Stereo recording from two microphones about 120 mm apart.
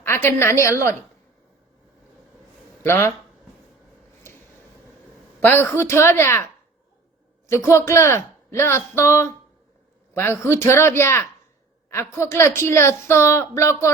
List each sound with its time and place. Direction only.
0.0 s a woman's voice: 20° left (ahead or behind)
2.8 s a woman's voice: 20° left (ahead or behind)
5.4 s a woman's voice: 15° left (ahead or behind)